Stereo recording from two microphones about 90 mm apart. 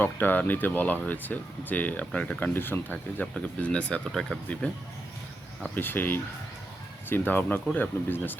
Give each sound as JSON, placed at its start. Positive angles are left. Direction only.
{"t": 0.0, "sound": "speech", "side_deg": 20}
{"t": 2.5, "sound": "speech", "side_deg": 25}
{"t": 5.7, "sound": "speech", "side_deg": 20}